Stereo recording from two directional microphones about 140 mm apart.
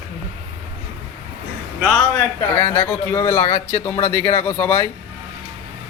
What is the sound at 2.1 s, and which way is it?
Speech, 10° left (ahead or behind).